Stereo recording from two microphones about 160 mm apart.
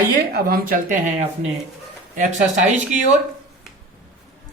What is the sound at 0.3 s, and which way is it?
Speech, 65° right (ahead or behind).